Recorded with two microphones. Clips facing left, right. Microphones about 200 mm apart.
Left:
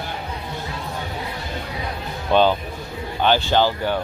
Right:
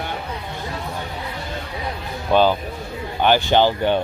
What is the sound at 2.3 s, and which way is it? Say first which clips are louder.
Speech: right 1 dB; 10° right (ahead or behind).